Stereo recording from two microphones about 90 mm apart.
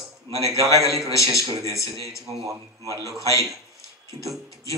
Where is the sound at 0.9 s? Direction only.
35° left (ahead or behind).